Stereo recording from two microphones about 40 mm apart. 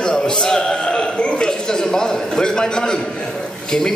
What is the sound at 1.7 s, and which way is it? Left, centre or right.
A man's voice, centre.